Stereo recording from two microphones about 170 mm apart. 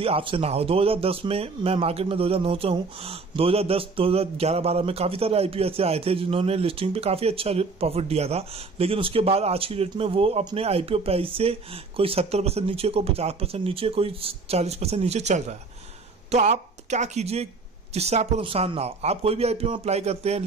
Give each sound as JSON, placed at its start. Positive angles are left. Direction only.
{"t": 0.0, "sound": "speech", "side_deg": -30}